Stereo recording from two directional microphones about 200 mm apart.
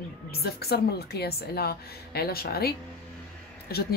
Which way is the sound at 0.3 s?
50° left (ahead or behind).